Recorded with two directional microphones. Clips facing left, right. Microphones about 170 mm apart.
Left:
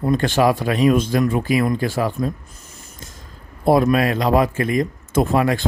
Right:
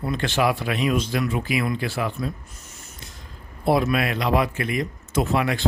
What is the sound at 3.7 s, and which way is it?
A man's voice, 45° left (ahead or behind).